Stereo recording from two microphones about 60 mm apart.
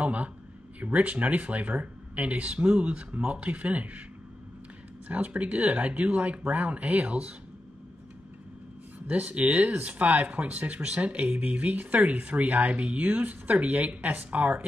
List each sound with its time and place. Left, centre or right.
0.0 s speech: right
5.0 s speech: right
9.1 s speech: right